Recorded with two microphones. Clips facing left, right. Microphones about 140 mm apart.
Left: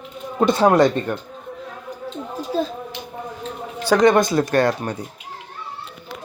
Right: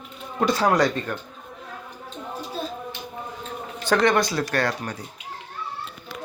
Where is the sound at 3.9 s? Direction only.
20° left (ahead or behind).